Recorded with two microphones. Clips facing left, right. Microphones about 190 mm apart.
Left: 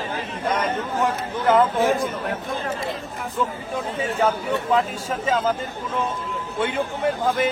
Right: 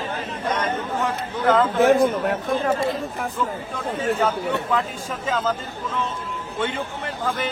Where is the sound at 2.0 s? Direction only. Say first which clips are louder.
Right 6 dB; 50° right (ahead or behind).